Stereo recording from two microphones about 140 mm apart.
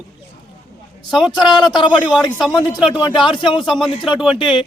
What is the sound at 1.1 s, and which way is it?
Speech, centre (ahead or behind).